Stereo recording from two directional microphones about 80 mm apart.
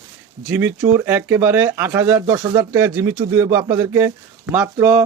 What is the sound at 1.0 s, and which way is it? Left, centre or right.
Speech, right.